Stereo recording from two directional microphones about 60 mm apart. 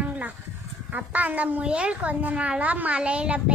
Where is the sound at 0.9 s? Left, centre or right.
Right.